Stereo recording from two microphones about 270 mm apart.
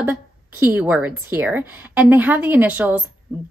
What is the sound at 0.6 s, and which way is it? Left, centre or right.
A woman's voice, centre.